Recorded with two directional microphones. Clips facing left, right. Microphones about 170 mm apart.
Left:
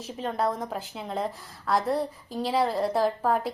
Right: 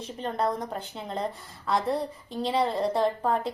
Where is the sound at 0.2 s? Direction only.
Centre (ahead or behind).